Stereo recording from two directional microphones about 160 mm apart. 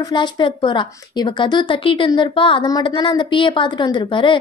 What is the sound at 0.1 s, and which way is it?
A woman's voice, 30° left (ahead or behind).